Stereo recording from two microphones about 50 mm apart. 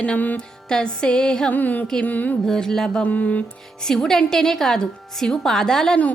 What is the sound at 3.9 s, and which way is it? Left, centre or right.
Music, centre.